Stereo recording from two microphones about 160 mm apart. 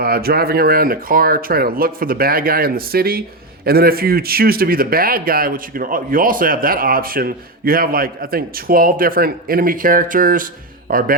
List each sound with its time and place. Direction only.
0.0 s speech: 70° right (ahead or behind)